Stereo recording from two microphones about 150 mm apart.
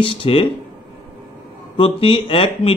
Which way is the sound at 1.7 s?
35° left (ahead or behind).